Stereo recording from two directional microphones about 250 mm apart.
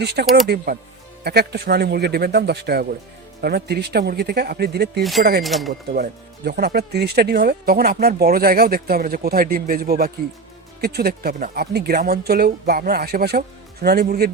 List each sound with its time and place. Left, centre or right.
0.0 s speech: right
5.4 s speech: centre
5.9 s speech: right